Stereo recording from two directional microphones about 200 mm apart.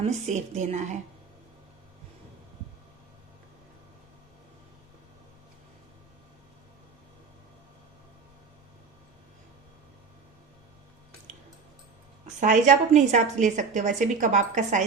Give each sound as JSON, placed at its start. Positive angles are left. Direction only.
{"t": 0.0, "sound": "a woman's voice", "side_deg": -35}
{"t": 12.4, "sound": "a woman's voice", "side_deg": -40}